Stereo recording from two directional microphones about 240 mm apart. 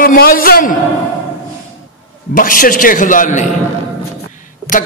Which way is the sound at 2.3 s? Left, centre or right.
Left.